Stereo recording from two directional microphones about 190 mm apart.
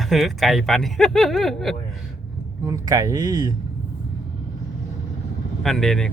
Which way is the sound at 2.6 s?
15° right (ahead or behind).